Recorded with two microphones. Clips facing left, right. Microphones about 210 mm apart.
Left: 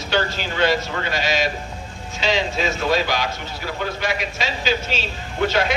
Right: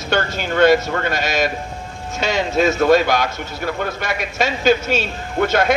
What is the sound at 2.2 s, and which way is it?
A man's voice, 50° right (ahead or behind).